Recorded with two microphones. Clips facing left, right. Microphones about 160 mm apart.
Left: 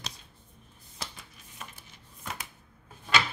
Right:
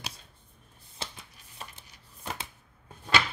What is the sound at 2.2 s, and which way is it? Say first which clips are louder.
Shuffling cards: right 2 dB; 30° right (ahead or behind).